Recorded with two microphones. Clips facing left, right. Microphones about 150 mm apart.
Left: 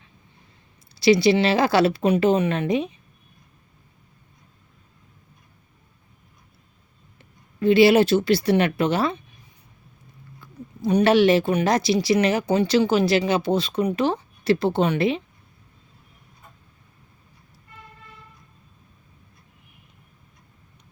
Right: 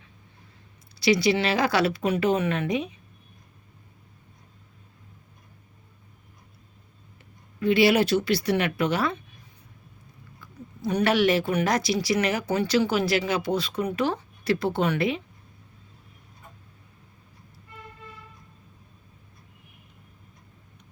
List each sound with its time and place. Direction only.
0.9 s speech: 30° left (ahead or behind)
7.6 s speech: 30° left (ahead or behind)
10.4 s speech: 25° left (ahead or behind)